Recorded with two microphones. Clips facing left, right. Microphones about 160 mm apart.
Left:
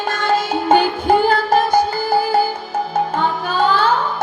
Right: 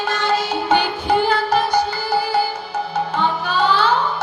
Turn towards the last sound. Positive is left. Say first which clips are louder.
# left 1 dB
turn(degrees=50)  # may be behind; listen again after turning